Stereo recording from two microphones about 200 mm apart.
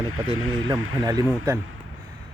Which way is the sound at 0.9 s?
15° right (ahead or behind).